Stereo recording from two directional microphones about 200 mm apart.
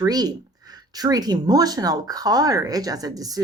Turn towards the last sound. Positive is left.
turn(degrees=-15)  # may be behind; listen again after turning